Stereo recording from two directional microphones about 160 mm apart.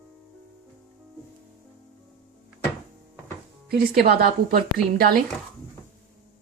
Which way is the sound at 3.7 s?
70° right (ahead or behind).